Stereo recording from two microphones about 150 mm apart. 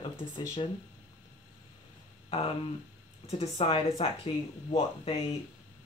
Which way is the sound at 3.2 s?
40° left (ahead or behind).